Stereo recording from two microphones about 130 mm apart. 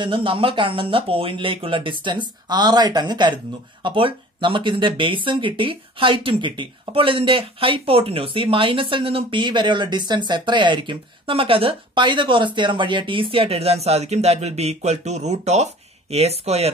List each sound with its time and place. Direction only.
0.0 s speech: 40° right (ahead or behind)